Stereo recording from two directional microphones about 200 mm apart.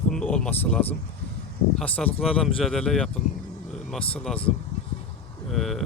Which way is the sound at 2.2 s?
Centre (ahead or behind).